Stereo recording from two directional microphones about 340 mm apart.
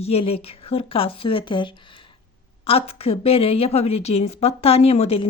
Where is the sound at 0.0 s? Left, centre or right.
Centre.